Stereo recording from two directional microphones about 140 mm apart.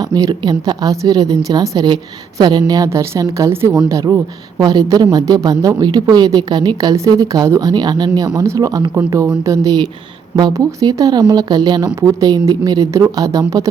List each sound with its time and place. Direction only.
0.0 s a woman's voice: 25° right (ahead or behind)